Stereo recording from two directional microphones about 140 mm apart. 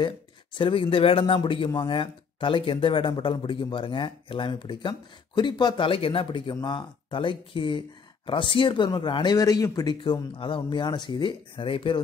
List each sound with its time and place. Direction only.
0.6 s speech: 35° left (ahead or behind)